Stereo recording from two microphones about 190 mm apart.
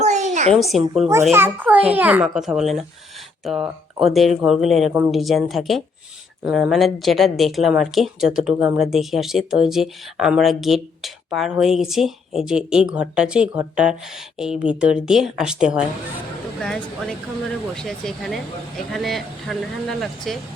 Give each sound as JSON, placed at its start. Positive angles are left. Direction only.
{"t": 0.0, "sound": "a sound", "side_deg": -35}
{"t": 0.5, "sound": "speech", "side_deg": 0}
{"t": 1.3, "sound": "a child's voice", "side_deg": -10}